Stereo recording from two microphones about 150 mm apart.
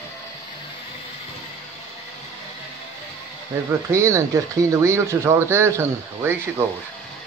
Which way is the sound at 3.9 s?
20° right (ahead or behind).